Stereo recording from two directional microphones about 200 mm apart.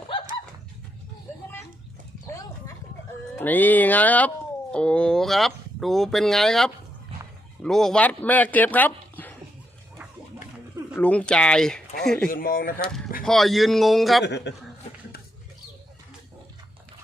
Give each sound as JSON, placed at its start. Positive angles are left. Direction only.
{"t": 3.3, "sound": "music", "side_deg": 10}
{"t": 4.7, "sound": "speech", "side_deg": 5}
{"t": 10.9, "sound": "speech", "side_deg": 5}
{"t": 12.3, "sound": "speech", "side_deg": 45}
{"t": 12.8, "sound": "speech", "side_deg": 5}
{"t": 14.3, "sound": "a man's voice", "side_deg": 60}